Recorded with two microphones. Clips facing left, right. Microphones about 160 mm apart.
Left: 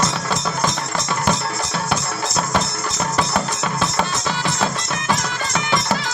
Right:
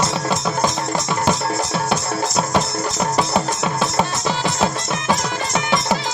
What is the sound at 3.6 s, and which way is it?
Music, 20° right (ahead or behind).